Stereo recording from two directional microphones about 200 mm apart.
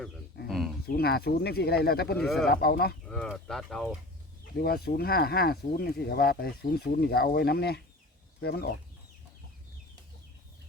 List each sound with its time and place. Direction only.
0.4 s a sound: centre (ahead or behind)
0.9 s speech: 50° left (ahead or behind)
2.1 s speech: centre (ahead or behind)
2.5 s speech: 50° left (ahead or behind)
3.1 s speech: 5° left (ahead or behind)
4.5 s speech: 50° left (ahead or behind)